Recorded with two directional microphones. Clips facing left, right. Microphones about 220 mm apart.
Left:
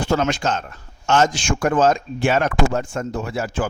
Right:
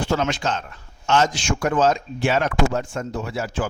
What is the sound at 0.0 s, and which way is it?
Speech, 45° left (ahead or behind).